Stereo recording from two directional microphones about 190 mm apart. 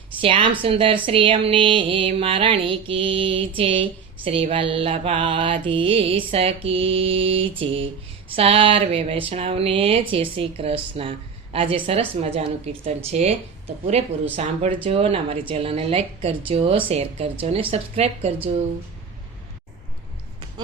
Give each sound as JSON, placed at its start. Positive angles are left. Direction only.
{"t": 0.2, "sound": "a woman's voice", "side_deg": -30}
{"t": 14.3, "sound": "a woman's voice", "side_deg": -35}